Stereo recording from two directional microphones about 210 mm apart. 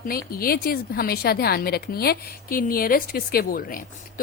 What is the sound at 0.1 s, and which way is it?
A woman's voice, 45° left (ahead or behind).